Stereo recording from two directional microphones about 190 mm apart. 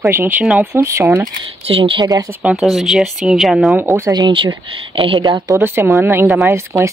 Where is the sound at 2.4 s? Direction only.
5° right (ahead or behind).